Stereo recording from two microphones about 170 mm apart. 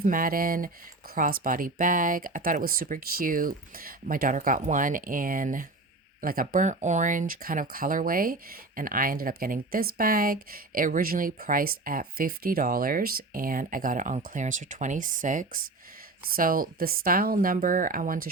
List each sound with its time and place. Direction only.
0.0 s speech: 55° right (ahead or behind)